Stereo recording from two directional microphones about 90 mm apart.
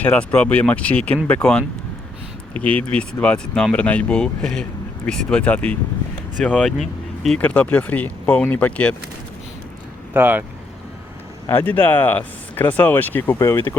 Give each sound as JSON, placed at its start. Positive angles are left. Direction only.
{"t": 0.0, "sound": "speech", "side_deg": 15}
{"t": 10.2, "sound": "speech", "side_deg": -25}
{"t": 11.4, "sound": "speech", "side_deg": 20}